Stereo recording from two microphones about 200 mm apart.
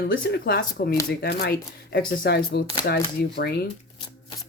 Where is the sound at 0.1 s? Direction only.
55° left (ahead or behind).